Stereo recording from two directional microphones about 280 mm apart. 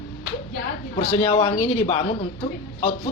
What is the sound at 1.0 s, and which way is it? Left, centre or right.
Speech, left.